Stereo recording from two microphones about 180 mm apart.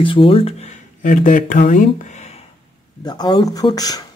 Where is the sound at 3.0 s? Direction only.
25° left (ahead or behind).